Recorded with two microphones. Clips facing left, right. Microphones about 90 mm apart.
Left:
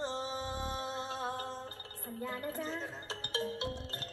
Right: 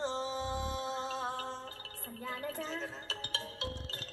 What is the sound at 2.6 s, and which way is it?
Music, 10° left (ahead or behind).